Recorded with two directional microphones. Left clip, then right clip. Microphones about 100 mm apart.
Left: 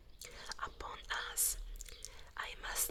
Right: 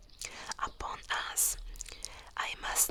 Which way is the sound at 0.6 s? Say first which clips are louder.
Right 8 dB; 25° right (ahead or behind).